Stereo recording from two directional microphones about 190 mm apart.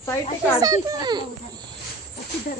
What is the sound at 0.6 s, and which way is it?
Speech, 20° right (ahead or behind).